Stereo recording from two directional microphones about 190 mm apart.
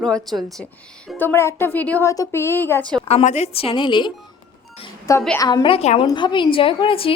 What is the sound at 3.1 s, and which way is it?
A woman's voice, 35° left (ahead or behind).